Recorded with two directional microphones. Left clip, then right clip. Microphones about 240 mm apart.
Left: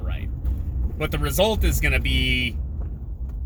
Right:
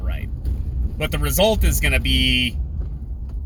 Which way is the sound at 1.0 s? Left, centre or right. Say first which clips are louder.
Right 3 dB; right.